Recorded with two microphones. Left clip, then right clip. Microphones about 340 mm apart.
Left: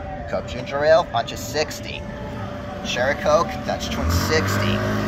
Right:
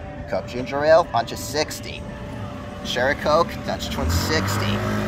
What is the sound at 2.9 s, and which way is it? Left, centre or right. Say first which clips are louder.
Speech: even; centre.